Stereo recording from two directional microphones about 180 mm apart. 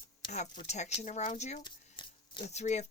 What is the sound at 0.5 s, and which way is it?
Speech, 35° left (ahead or behind).